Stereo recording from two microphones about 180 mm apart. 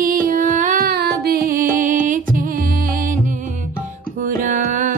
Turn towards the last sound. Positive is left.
turn(degrees=-45)  # may be behind; listen again after turning